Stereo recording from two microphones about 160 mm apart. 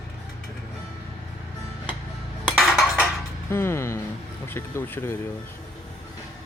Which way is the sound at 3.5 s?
15° left (ahead or behind).